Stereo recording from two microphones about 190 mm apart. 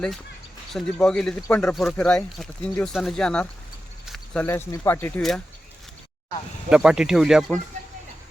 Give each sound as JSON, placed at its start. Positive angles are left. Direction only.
{"t": 0.7, "sound": "speech", "side_deg": 5}
{"t": 4.0, "sound": "a sound", "side_deg": 0}
{"t": 4.4, "sound": "speech", "side_deg": 15}
{"t": 6.7, "sound": "speech", "side_deg": -5}